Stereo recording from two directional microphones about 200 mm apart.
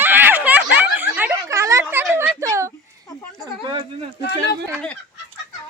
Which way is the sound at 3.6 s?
25° right (ahead or behind).